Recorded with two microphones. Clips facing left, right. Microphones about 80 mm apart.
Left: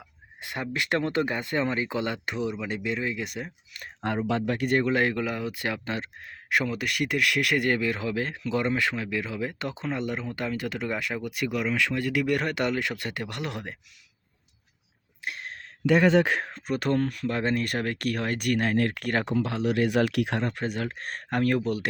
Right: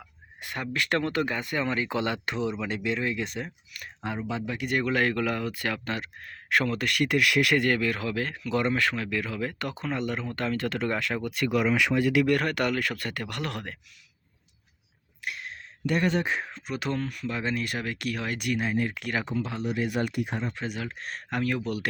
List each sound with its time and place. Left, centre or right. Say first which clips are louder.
0.4 s speech: even; left
1.9 s speech: right 1 dB; centre
4.3 s speech: left 5 dB; left
6.5 s speech: right 1 dB; centre
7.5 s speech: right 1 dB; centre
11.7 s speech: right 3 dB; centre
12.2 s speech: right 1 dB; centre
15.2 s a sound: left 1 dB; left
16.0 s speech: left 5 dB; left
16.6 s speech: left 6 dB; left
19.0 s speech: left 3 dB; left
19.3 s speech: left 4 dB; left
20.6 s speech: left 3 dB; left